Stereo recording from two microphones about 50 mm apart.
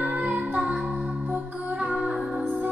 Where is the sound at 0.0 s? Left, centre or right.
Right.